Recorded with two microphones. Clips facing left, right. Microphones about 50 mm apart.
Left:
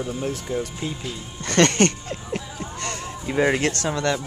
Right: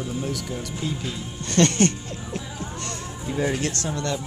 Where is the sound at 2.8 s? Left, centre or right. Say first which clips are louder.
Left 3 dB; left.